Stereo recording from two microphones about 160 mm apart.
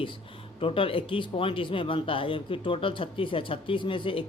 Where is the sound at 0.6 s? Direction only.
35° left (ahead or behind).